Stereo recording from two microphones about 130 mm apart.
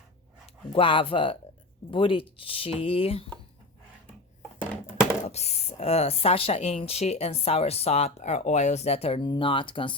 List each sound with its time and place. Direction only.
0.7 s speech: 45° left (ahead or behind)
4.6 s a sound: 10° left (ahead or behind)
5.2 s speech: 55° left (ahead or behind); by 9.9 s 40° left (ahead or behind)